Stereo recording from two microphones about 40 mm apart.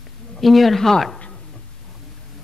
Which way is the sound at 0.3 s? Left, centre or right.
Centre.